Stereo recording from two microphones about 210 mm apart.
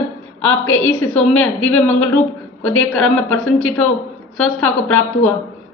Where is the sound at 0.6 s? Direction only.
80° left.